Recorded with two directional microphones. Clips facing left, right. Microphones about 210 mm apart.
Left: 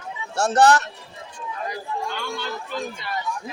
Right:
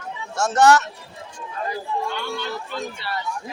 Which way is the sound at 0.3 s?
35° left (ahead or behind).